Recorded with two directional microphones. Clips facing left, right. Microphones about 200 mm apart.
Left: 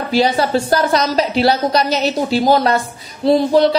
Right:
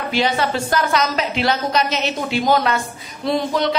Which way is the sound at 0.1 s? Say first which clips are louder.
Left 5 dB; 35° left (ahead or behind).